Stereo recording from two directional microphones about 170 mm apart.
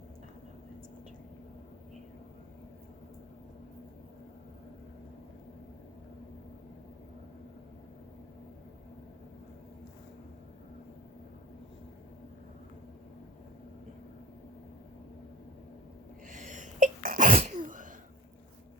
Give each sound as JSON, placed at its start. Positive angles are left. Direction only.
{"t": 16.3, "sound": "sneeze", "side_deg": -50}
{"t": 17.3, "sound": "sneeze", "side_deg": -45}